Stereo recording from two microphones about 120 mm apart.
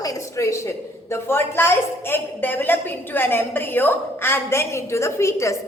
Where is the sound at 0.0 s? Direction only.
30° left (ahead or behind).